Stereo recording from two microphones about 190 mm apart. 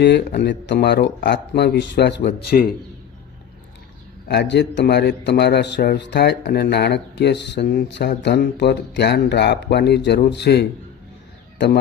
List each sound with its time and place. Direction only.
0.0 s a man's voice: 60° left (ahead or behind)
4.3 s a man's voice: 65° left (ahead or behind)